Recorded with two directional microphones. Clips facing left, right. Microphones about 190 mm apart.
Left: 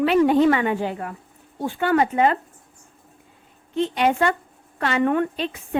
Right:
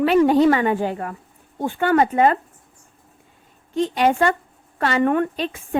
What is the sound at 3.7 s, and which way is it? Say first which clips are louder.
A woman's voice: right 2 dB; 40° right (ahead or behind).